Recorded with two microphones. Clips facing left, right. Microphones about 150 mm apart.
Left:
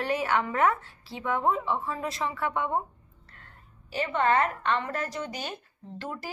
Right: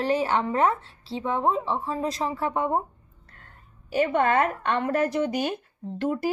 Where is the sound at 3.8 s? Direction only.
50° right (ahead or behind).